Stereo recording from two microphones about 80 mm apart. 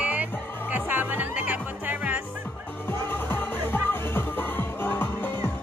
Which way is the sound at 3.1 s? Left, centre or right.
Left.